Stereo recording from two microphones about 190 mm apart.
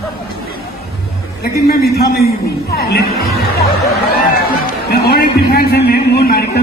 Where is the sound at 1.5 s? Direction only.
55° left (ahead or behind).